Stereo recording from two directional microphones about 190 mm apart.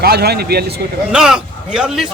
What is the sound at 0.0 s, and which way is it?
Speech, 55° right (ahead or behind).